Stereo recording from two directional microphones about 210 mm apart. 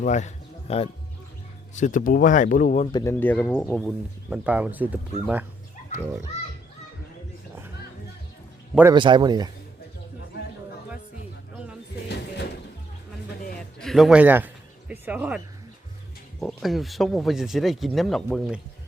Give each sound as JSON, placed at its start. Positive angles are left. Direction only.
{"t": 0.0, "sound": "speech", "side_deg": 35}
{"t": 2.9, "sound": "speech", "side_deg": 15}
{"t": 3.8, "sound": "speech", "side_deg": -5}
{"t": 8.7, "sound": "a man's voice", "side_deg": -10}
{"t": 9.0, "sound": "a man's voice", "side_deg": -20}
{"t": 13.7, "sound": "a sound", "side_deg": 0}
{"t": 16.4, "sound": "speech", "side_deg": 0}